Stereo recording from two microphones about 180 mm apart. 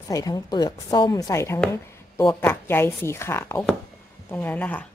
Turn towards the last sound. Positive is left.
turn(degrees=10)  # may be behind; listen again after turning